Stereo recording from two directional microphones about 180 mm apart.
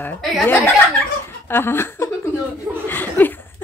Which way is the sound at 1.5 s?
15° left (ahead or behind).